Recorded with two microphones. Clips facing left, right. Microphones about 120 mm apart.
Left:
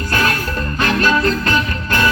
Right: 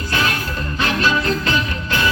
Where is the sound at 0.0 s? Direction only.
50° left (ahead or behind).